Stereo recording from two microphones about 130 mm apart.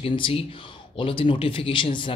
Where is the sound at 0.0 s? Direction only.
45° left (ahead or behind).